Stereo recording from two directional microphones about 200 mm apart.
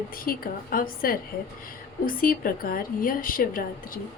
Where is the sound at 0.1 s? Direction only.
45° left (ahead or behind).